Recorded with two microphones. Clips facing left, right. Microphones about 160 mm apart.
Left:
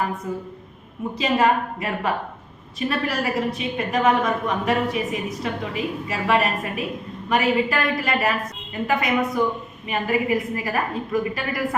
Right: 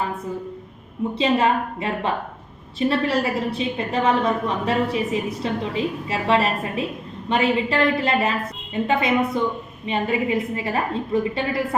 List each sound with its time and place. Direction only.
1.2 s a woman's voice: 25° right (ahead or behind)